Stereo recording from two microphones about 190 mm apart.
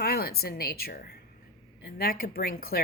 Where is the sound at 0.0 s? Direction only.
55° left (ahead or behind).